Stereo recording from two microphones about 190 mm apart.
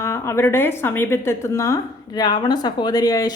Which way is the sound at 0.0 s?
15° left (ahead or behind).